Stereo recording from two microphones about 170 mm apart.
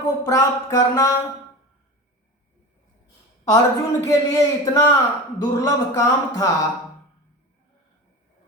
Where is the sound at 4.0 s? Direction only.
20° left (ahead or behind).